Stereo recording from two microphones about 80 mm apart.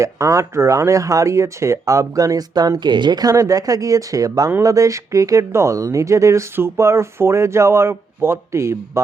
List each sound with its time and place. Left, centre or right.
0.0 s speech: right